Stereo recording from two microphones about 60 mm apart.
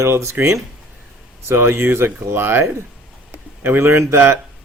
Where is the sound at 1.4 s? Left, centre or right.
Right.